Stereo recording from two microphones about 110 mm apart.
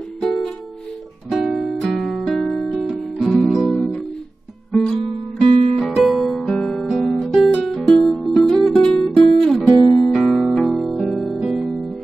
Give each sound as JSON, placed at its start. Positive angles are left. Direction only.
{"t": 1.3, "sound": "music", "side_deg": 0}
{"t": 3.4, "sound": "guitar", "side_deg": 0}
{"t": 4.7, "sound": "music", "side_deg": 0}
{"t": 5.4, "sound": "music", "side_deg": -55}
{"t": 5.8, "sound": "guitar", "side_deg": 0}
{"t": 7.5, "sound": "music", "side_deg": 0}